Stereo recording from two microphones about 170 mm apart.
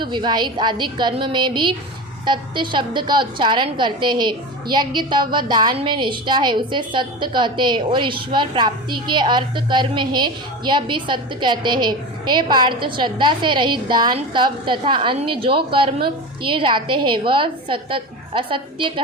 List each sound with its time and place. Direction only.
0.0 s a woman's voice: 25° right (ahead or behind)